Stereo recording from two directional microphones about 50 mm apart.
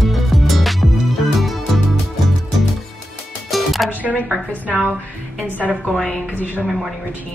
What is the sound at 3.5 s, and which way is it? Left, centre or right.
Music, centre.